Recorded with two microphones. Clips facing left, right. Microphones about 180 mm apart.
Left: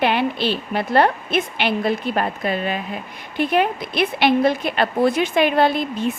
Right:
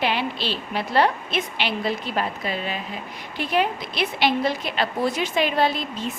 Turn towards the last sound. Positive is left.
turn(degrees=55)  # may be behind; listen again after turning